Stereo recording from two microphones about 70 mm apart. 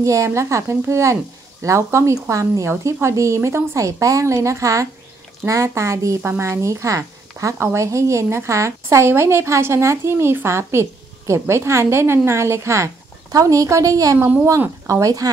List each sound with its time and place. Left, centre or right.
0.0 s a woman's voice: right